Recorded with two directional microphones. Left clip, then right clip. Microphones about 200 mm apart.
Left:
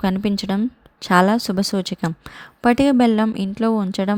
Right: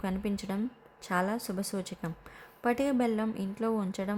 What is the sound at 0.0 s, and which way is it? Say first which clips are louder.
A woman's voice: left 13 dB; 40° left (ahead or behind).